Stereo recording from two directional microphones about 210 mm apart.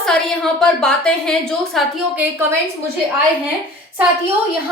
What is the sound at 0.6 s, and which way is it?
A woman's voice, 5° left (ahead or behind).